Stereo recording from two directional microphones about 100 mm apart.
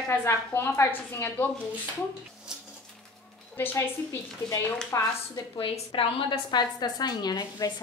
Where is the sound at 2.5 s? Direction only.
5° right (ahead or behind).